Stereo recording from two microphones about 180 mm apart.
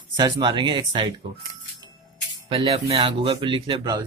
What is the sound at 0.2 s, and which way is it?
Speech, 25° right (ahead or behind).